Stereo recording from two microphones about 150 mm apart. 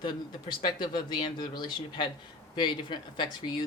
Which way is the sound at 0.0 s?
30° left (ahead or behind).